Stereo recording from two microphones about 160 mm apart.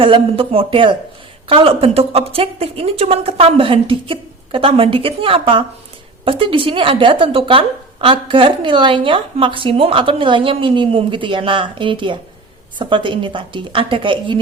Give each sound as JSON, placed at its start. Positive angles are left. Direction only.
{"t": 0.0, "sound": "a woman's voice", "side_deg": -35}